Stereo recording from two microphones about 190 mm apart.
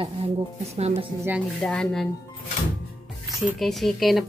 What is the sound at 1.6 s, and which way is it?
Speech, 5° left (ahead or behind).